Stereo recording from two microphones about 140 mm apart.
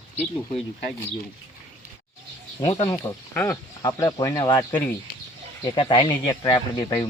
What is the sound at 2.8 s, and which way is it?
Speech, 30° left (ahead or behind).